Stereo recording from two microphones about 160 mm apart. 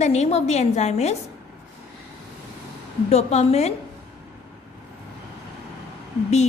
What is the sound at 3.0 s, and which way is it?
Speech, 40° left (ahead or behind).